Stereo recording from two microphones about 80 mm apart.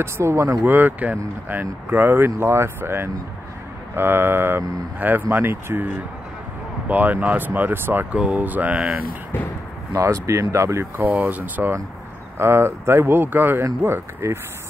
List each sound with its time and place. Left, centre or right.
0.0 s speech: right
0.7 s speech: right
9.9 s speech: right
11.0 s speech: right